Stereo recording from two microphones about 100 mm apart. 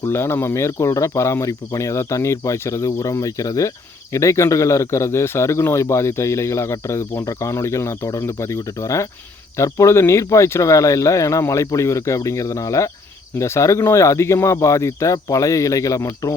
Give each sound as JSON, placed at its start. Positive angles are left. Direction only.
{"t": 0.0, "sound": "a man's voice", "side_deg": 25}